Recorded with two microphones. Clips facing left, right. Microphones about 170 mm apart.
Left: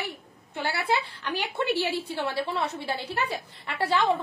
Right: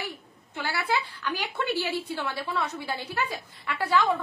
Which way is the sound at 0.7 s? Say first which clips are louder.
Even; 25° left (ahead or behind).